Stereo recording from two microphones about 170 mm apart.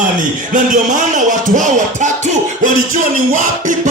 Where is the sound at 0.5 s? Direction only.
50° right (ahead or behind).